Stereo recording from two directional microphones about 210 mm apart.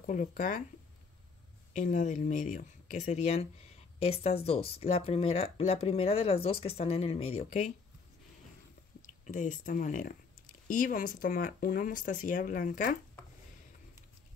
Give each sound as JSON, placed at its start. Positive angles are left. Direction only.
{"t": 0.0, "sound": "speech", "side_deg": 40}
{"t": 1.7, "sound": "speech", "side_deg": 35}
{"t": 9.0, "sound": "speech", "side_deg": 40}